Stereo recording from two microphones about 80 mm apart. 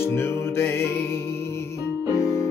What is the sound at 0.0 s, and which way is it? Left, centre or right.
Music, left.